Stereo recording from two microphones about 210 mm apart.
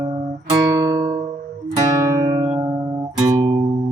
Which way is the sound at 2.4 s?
25° right (ahead or behind).